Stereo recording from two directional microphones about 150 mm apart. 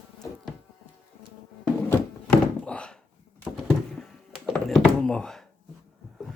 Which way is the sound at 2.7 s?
5° left (ahead or behind).